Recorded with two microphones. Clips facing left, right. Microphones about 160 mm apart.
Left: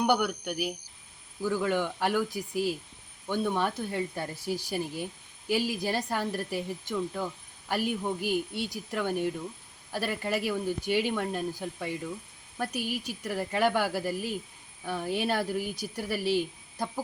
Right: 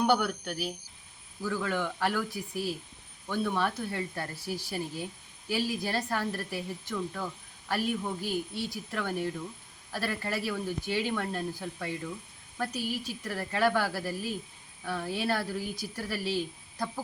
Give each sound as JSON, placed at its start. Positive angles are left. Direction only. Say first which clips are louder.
{"t": 0.0, "sound": "speech", "louder": "even", "side_deg": 15}